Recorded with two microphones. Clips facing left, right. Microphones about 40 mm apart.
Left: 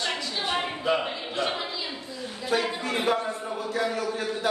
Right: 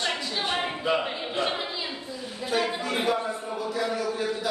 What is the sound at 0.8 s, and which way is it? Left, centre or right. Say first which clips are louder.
Speech: even; centre.